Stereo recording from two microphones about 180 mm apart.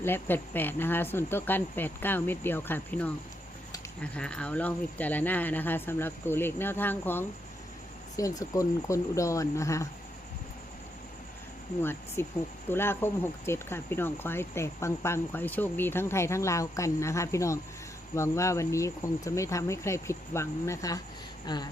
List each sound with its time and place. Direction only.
0.0 s speech: 10° left (ahead or behind)
11.8 s speech: 15° left (ahead or behind)